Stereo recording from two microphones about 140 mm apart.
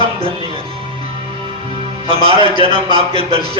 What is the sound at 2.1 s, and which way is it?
A man's voice, 45° right (ahead or behind).